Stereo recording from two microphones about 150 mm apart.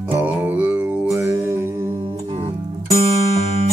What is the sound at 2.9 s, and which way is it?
Music, 45° right (ahead or behind).